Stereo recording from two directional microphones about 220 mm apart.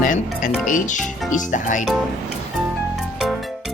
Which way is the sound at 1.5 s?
35° left (ahead or behind).